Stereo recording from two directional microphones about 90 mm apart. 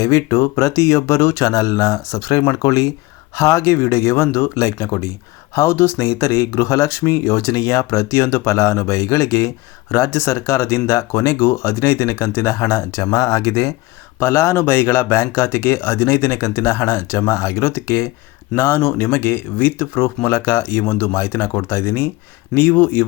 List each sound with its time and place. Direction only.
0.0 s speech: 35° left (ahead or behind)